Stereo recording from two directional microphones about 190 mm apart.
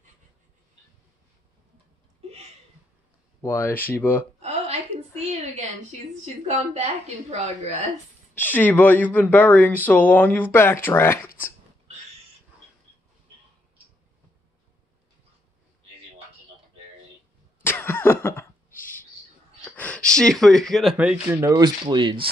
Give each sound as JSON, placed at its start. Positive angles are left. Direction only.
{"t": 3.3, "sound": "speech", "side_deg": 10}
{"t": 4.4, "sound": "a sound", "side_deg": -35}
{"t": 6.4, "sound": "a woman's voice", "side_deg": -35}
{"t": 8.4, "sound": "speech", "side_deg": 10}
{"t": 17.6, "sound": "cough", "side_deg": 10}
{"t": 19.7, "sound": "speech", "side_deg": 5}